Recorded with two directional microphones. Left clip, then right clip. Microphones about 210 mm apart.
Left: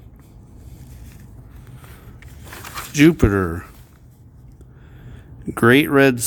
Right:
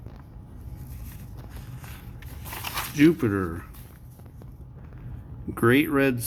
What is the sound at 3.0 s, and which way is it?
Speech, 50° left (ahead or behind).